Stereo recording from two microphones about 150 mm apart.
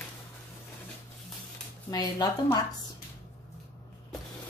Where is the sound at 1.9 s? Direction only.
25° left (ahead or behind).